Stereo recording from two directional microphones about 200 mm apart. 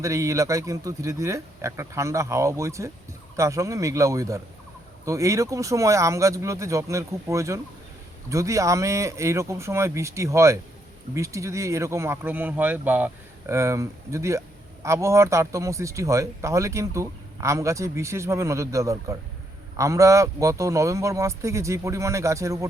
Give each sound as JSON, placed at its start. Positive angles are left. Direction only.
{"t": 0.0, "sound": "speech", "side_deg": -15}